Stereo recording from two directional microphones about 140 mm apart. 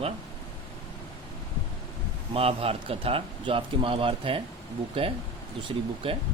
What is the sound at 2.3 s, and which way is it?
Speech, 45° right (ahead or behind).